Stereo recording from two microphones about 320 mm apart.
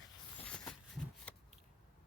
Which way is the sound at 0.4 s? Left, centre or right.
Centre.